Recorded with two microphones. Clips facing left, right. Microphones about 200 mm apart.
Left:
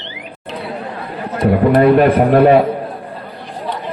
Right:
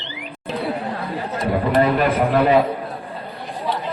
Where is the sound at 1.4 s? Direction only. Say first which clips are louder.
Left 8 dB; 55° left (ahead or behind).